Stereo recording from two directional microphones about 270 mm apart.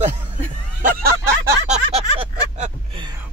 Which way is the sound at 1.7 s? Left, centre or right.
Right.